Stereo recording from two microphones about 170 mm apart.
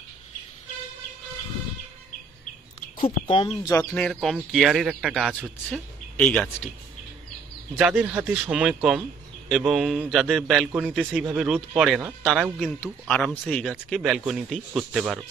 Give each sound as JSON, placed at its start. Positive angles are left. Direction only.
{"t": 3.3, "sound": "speech", "side_deg": 35}
{"t": 3.9, "sound": "speech", "side_deg": 5}
{"t": 6.1, "sound": "speech", "side_deg": 10}
{"t": 7.7, "sound": "speech", "side_deg": -5}